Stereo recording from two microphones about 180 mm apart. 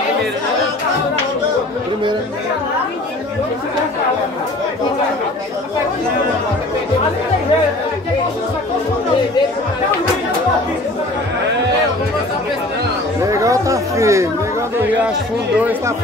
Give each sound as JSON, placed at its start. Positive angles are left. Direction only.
{"t": 13.2, "sound": "chatter", "side_deg": -15}